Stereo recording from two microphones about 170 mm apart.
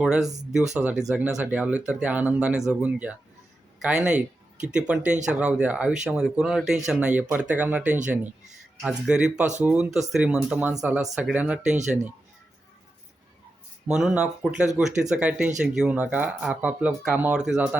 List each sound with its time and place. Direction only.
0.0 s a man's voice: 5° right (ahead or behind)
13.8 s speech: 5° right (ahead or behind)